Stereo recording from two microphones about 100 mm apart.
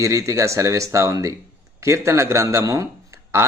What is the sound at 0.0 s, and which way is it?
Speech, 30° right (ahead or behind).